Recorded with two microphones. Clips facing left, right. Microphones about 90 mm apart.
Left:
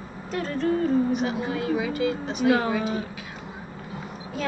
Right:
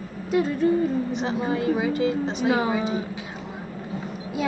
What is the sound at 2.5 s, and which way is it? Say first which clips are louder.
Speech: even; 15° right (ahead or behind).